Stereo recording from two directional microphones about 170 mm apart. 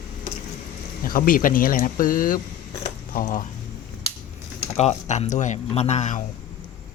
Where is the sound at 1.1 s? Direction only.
55° left (ahead or behind).